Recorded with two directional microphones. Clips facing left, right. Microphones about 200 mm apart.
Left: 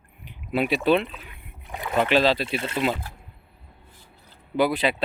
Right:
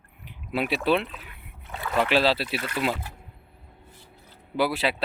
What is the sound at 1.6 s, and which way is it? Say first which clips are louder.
Speech: left 2 dB; 15° left (ahead or behind).